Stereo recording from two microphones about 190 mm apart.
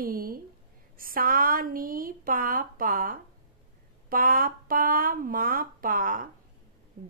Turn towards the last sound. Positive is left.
turn(degrees=-40)  # may be behind; listen again after turning